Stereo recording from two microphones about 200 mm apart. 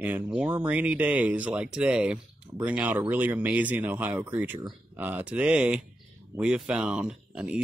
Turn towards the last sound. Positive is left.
turn(degrees=-5)  # may be behind; listen again after turning